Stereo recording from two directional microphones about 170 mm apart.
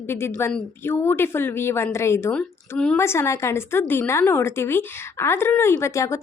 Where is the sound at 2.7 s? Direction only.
5° left (ahead or behind).